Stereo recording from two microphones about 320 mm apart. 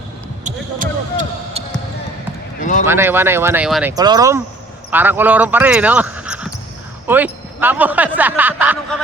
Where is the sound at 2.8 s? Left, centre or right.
Centre.